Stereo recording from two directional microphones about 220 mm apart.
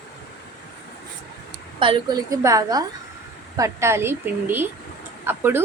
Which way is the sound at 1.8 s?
20° right (ahead or behind).